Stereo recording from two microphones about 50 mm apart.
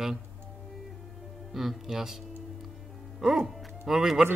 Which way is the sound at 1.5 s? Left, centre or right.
Centre.